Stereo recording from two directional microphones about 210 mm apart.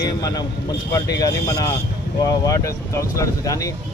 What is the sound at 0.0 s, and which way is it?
Speech, 20° left (ahead or behind).